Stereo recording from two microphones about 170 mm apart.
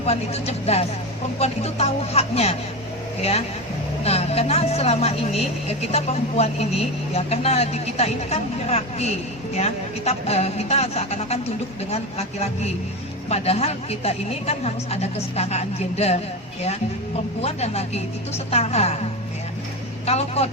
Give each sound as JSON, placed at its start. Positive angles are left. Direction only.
{"t": 0.0, "sound": "speech", "side_deg": 40}
{"t": 17.4, "sound": "speech", "side_deg": 40}
{"t": 20.1, "sound": "speech", "side_deg": 40}